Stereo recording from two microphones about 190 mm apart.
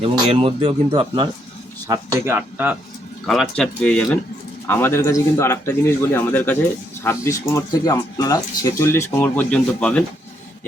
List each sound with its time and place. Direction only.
0.0 s speech: 30° right (ahead or behind)
1.9 s speech: 15° right (ahead or behind)
3.2 s speech: centre (ahead or behind)